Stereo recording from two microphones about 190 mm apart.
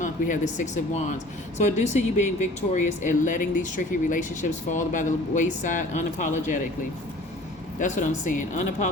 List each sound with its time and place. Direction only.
0.0 s speech: 40° left (ahead or behind)
7.8 s speech: 40° left (ahead or behind)